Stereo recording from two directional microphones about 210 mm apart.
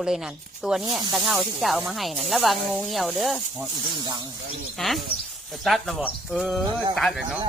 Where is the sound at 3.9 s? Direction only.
20° right (ahead or behind).